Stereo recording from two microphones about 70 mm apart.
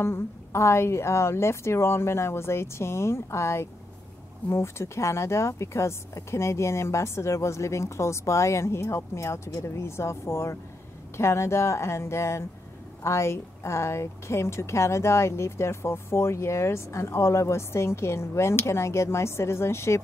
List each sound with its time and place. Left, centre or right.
0.0 s speech: left